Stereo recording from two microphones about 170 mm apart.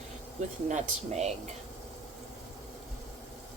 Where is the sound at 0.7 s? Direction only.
45° right (ahead or behind).